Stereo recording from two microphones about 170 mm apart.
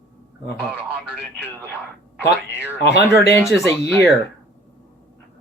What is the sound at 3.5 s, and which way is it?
Speech, 15° left (ahead or behind).